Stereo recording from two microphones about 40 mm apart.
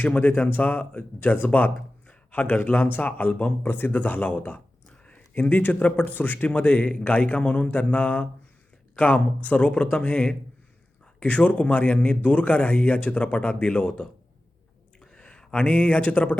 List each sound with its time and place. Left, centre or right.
0.1 s speech: left
3.6 s speech: left
3.9 s a man's voice: left
6.5 s a man's voice: left
9.4 s speech: left
11.3 s a man's voice: left
14.9 s a sound: left
15.6 s a man's voice: left